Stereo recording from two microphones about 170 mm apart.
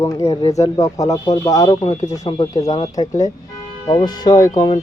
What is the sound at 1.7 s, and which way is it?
Speech, 35° left (ahead or behind).